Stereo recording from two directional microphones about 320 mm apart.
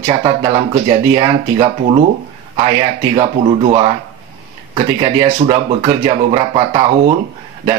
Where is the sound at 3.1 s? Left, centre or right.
Centre.